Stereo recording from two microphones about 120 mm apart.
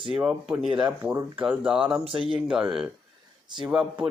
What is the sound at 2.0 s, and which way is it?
Speech, 50° right (ahead or behind).